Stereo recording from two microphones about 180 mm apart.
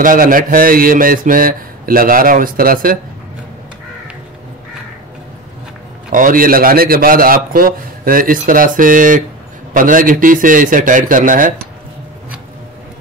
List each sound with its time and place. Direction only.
0.0 s a man's voice: 50° right (ahead or behind)
6.0 s a man's voice: 50° right (ahead or behind)